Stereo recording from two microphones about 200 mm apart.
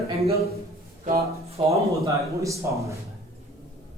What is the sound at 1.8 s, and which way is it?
Speech, 15° right (ahead or behind).